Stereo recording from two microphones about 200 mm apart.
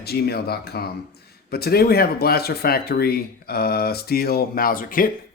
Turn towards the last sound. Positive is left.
turn(degrees=45)  # may be behind; listen again after turning